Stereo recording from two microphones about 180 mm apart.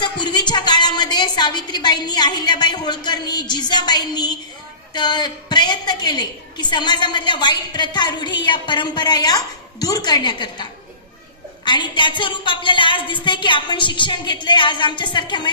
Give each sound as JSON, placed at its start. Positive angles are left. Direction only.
{"t": 0.0, "sound": "a woman's voice", "side_deg": 25}